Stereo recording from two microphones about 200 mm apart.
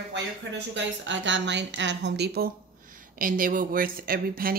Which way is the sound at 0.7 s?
65° right (ahead or behind).